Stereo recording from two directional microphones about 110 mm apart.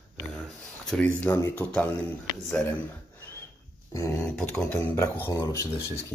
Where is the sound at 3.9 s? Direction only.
30° left (ahead or behind).